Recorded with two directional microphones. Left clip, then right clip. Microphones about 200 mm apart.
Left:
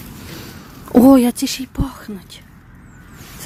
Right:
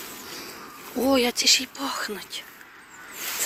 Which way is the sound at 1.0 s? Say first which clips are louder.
Left 10 dB; 50° left (ahead or behind).